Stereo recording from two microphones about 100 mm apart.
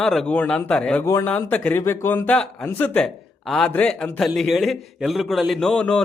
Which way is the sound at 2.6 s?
15° left (ahead or behind).